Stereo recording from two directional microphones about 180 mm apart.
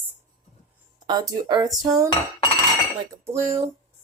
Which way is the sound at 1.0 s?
25° right (ahead or behind).